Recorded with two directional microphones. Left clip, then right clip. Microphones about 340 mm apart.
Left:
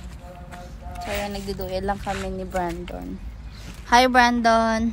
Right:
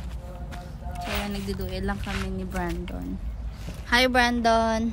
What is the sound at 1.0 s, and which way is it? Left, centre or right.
Music, centre.